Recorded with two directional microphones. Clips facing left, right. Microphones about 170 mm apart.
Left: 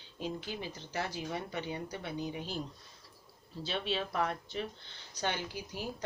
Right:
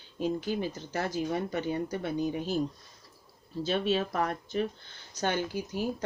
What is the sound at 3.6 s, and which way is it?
Speech, 45° right (ahead or behind).